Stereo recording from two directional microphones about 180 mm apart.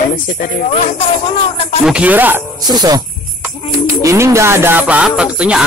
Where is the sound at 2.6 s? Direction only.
20° right (ahead or behind).